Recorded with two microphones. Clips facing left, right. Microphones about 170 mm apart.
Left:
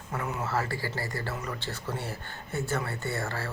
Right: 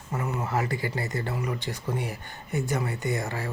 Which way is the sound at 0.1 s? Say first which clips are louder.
Right 2 dB; 10° right (ahead or behind).